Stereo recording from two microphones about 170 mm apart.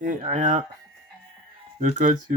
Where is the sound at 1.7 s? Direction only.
50° right (ahead or behind).